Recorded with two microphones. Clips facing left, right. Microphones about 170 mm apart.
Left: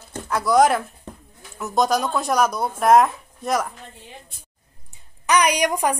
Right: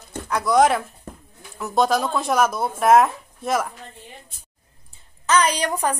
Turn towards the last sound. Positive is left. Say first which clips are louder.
# left 2 dB
turn(degrees=15)  # may be behind; listen again after turning